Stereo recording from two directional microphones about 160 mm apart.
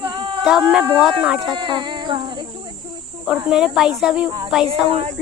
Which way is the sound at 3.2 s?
5° right (ahead or behind).